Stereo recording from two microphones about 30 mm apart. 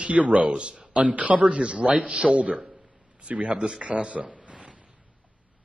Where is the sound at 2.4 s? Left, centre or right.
Right.